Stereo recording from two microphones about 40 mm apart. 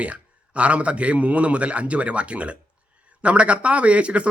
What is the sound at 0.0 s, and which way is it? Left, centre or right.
Speech, right.